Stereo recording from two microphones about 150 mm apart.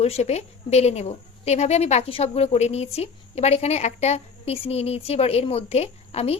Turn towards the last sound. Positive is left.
turn(degrees=45)  # may be behind; listen again after turning